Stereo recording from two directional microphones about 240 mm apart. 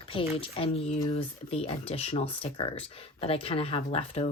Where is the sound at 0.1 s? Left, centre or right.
Left.